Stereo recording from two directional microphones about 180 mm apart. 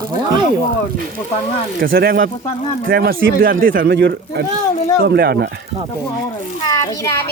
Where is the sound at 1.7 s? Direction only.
55° right (ahead or behind).